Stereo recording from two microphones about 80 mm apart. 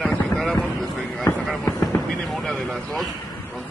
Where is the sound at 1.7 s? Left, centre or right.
Left.